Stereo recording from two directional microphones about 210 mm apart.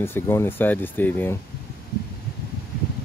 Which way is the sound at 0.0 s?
10° left (ahead or behind).